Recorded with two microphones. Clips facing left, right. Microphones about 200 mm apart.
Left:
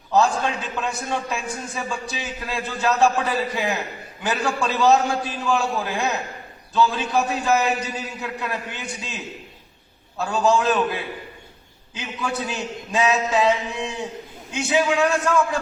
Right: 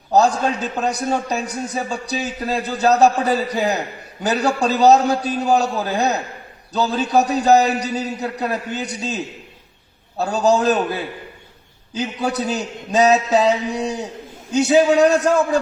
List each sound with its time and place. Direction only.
0.1 s a man's voice: 40° right (ahead or behind)
11.9 s a man's voice: 40° right (ahead or behind)